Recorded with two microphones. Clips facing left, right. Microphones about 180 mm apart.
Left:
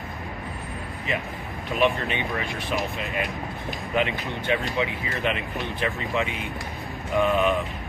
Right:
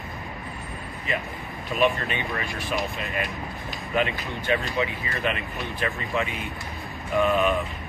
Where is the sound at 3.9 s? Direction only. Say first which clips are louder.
Even; 15° left (ahead or behind).